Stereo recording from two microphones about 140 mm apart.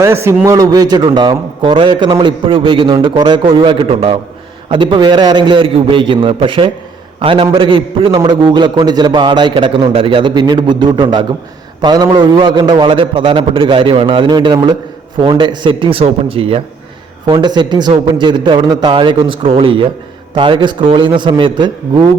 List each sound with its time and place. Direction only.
0.0 s a man's voice: 20° right (ahead or behind); by 22.1 s 35° right (ahead or behind)